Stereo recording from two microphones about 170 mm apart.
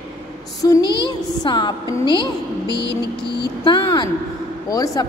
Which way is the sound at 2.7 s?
80° left.